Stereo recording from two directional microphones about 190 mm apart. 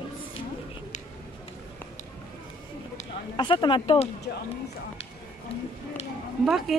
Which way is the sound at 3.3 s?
25° left (ahead or behind).